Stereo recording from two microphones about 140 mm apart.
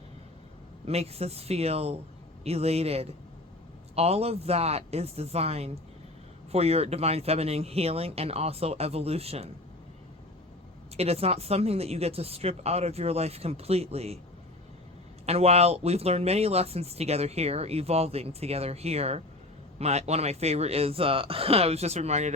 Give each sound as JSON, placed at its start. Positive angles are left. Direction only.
{"t": 0.9, "sound": "speech", "side_deg": -45}
{"t": 10.9, "sound": "speech", "side_deg": -45}
{"t": 15.3, "sound": "speech", "side_deg": -45}